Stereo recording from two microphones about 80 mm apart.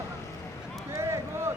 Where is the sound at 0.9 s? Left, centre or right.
Right.